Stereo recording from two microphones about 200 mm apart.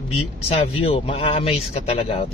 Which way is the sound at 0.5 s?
30° left (ahead or behind).